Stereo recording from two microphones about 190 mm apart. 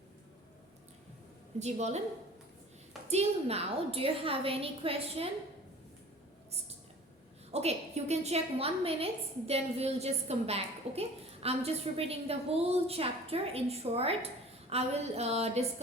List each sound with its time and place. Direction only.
1.5 s a woman's voice: 35° right (ahead or behind)
3.1 s a woman's voice: 35° right (ahead or behind)
7.5 s a woman's voice: 35° right (ahead or behind)